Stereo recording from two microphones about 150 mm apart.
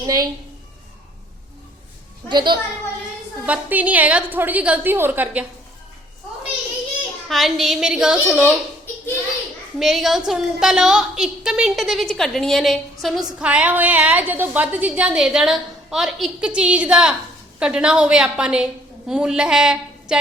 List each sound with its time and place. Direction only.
0.0 s a woman's voice: 25° right (ahead or behind)
2.3 s a woman's voice: 30° right (ahead or behind)
3.4 s a woman's voice: 10° right (ahead or behind)
7.3 s a woman's voice: centre (ahead or behind)
9.7 s a woman's voice: centre (ahead or behind)